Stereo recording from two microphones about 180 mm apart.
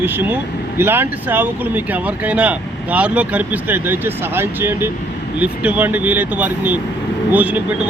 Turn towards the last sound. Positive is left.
turn(degrees=-10)  # may be behind; listen again after turning